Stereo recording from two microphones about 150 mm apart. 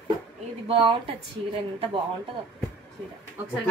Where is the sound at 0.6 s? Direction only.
40° right (ahead or behind).